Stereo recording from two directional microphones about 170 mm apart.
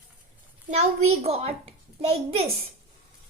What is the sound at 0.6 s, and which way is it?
A child's voice, 40° right (ahead or behind).